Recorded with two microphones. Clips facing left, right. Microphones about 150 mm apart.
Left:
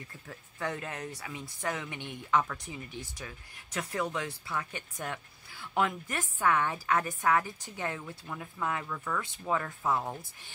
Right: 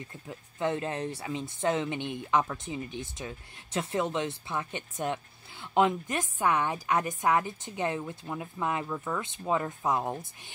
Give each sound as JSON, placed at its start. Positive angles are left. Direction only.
{"t": 0.0, "sound": "speech", "side_deg": -20}